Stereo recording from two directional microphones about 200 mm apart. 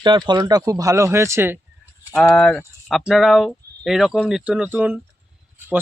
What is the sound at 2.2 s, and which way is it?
Speech, 5° left (ahead or behind).